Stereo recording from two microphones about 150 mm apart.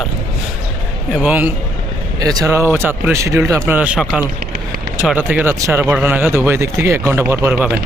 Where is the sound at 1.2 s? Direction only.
10° right (ahead or behind).